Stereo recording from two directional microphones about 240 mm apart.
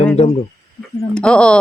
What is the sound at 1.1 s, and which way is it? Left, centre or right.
Speech, centre.